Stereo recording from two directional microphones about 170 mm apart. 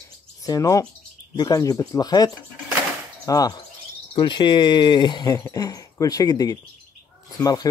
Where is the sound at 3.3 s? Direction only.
20° left (ahead or behind).